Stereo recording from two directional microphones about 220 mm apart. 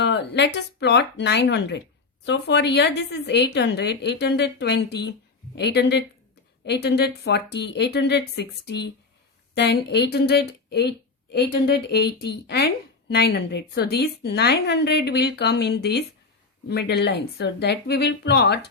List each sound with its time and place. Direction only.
0.0 s speech: 50° left (ahead or behind)